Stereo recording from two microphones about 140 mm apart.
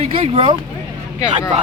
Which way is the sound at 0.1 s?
35° right (ahead or behind).